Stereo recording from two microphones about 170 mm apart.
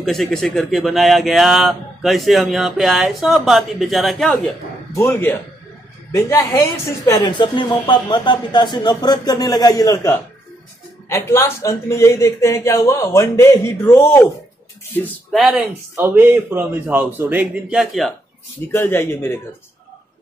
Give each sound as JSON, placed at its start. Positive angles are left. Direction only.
{"t": 0.0, "sound": "speech", "side_deg": 0}
{"t": 4.9, "sound": "a man's voice", "side_deg": 15}
{"t": 7.2, "sound": "a man's voice", "side_deg": 25}
{"t": 15.3, "sound": "speech", "side_deg": 0}
{"t": 16.0, "sound": "a man's voice", "side_deg": -10}
{"t": 18.7, "sound": "a man's voice", "side_deg": 15}